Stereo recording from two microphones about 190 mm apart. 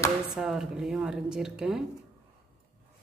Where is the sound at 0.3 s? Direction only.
Centre (ahead or behind).